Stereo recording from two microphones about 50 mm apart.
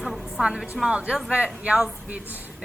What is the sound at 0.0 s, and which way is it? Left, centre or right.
Music, centre.